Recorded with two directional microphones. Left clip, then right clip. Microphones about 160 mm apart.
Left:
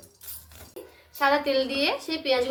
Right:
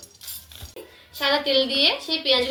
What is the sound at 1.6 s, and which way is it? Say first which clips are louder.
Speech: right 5 dB; 40° left (ahead or behind).